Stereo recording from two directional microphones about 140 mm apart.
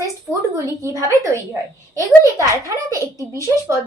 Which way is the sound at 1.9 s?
25° right (ahead or behind).